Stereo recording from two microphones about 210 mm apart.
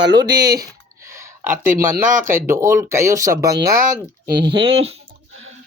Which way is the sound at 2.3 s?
15° right (ahead or behind).